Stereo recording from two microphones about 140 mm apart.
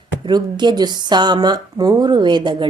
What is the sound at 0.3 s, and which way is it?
A woman's voice, 30° right (ahead or behind).